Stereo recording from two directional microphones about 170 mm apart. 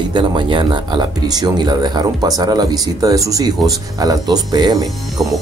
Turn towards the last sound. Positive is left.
turn(degrees=-25)  # may be behind; listen again after turning